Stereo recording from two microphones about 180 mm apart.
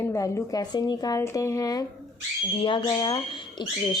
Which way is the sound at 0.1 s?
15° left (ahead or behind).